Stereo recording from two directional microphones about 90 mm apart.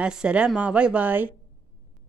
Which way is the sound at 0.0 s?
10° right (ahead or behind).